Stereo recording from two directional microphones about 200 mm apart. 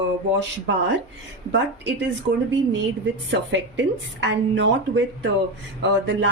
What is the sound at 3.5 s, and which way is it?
Speech, 65° right (ahead or behind).